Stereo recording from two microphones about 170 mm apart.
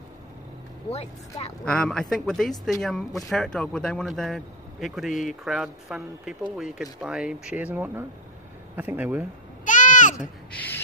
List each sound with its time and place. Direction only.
0.8 s speech: 40° left (ahead or behind)
1.6 s speech: 5° left (ahead or behind)
9.7 s a sound: 50° left (ahead or behind)